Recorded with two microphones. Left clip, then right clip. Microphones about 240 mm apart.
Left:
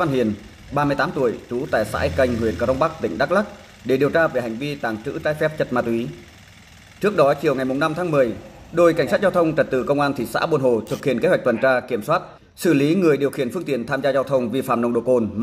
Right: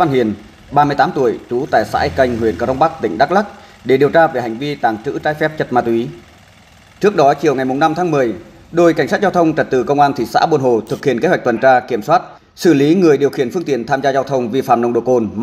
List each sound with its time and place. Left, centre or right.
0.0 s speech: centre